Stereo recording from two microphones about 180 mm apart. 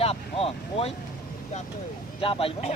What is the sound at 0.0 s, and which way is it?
Speech, 35° left (ahead or behind).